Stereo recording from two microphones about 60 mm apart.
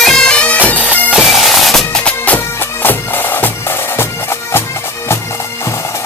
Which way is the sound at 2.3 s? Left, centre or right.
Left.